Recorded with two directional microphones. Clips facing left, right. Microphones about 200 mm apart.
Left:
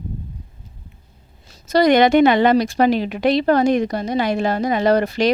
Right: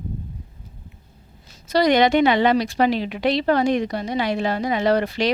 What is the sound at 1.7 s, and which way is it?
A woman's voice, 50° left (ahead or behind).